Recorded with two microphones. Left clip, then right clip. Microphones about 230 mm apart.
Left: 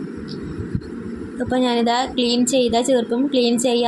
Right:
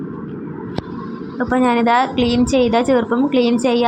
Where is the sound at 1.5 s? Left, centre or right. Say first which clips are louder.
Right 4 dB; centre.